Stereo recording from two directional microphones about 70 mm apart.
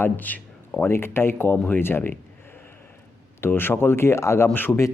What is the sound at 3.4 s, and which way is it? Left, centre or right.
Speech, left.